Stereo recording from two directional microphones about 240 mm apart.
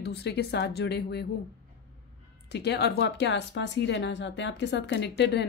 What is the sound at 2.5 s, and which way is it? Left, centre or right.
A woman's voice, left.